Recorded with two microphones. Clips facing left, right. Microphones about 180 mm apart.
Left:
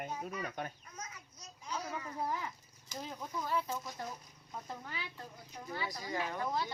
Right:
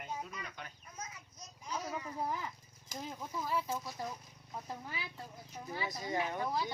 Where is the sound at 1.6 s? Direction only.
10° right (ahead or behind).